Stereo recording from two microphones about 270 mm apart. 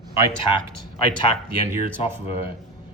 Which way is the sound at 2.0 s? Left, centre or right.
Left.